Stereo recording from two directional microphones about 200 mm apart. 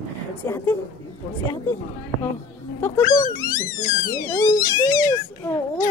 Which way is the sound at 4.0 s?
20° left (ahead or behind).